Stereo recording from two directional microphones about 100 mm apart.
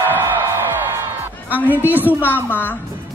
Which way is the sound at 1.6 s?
15° right (ahead or behind).